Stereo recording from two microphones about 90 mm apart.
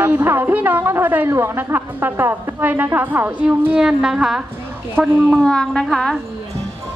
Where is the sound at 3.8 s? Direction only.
5° right (ahead or behind).